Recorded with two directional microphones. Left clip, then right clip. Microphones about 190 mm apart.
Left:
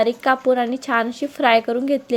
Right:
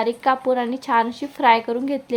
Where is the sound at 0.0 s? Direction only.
10° left (ahead or behind).